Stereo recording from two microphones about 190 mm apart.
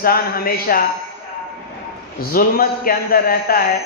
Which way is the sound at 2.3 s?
50° left (ahead or behind).